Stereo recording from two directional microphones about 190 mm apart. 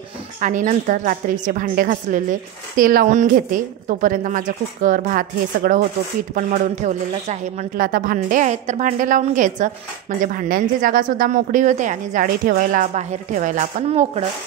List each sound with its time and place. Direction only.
0.4 s speech: 45° right (ahead or behind)